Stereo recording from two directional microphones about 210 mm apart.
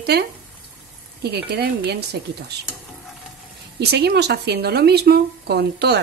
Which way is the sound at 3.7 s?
50° right (ahead or behind).